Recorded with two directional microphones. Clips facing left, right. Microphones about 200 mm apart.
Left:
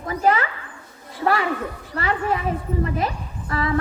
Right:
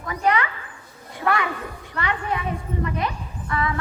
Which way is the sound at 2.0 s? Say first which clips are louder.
Left 3 dB; 35° left (ahead or behind).